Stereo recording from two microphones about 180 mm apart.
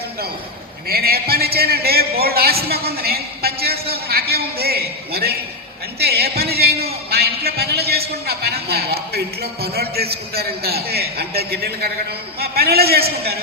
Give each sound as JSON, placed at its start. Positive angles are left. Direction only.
{"t": 0.9, "sound": "a man's voice", "side_deg": -55}